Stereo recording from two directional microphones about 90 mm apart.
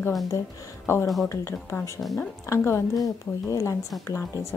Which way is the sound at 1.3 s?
30° left (ahead or behind).